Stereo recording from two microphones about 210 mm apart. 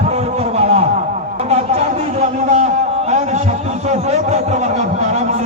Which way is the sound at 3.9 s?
30° right (ahead or behind).